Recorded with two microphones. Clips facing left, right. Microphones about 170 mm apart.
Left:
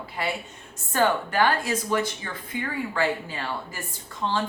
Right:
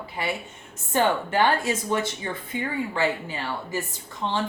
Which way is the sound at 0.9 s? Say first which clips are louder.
Even; 25° right (ahead or behind).